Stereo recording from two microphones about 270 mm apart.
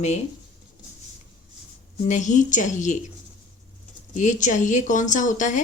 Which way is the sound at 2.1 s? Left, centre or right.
Left.